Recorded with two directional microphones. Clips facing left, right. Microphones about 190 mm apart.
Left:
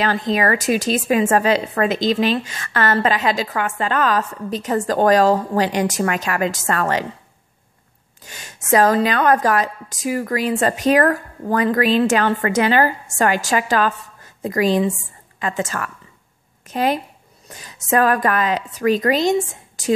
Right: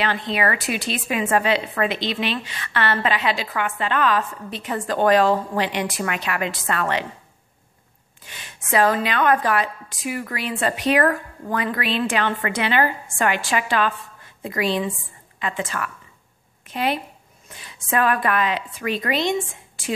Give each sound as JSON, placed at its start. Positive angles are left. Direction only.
{"t": 0.0, "sound": "a woman's voice", "side_deg": 40}
{"t": 8.2, "sound": "a woman's voice", "side_deg": 40}